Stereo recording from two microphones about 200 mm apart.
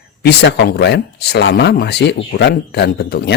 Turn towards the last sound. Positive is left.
turn(degrees=55)  # may be behind; listen again after turning